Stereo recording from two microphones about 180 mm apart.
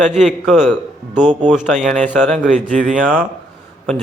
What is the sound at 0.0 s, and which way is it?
A man's voice, centre (ahead or behind).